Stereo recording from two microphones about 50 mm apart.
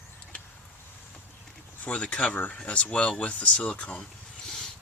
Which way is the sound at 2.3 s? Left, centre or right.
Left.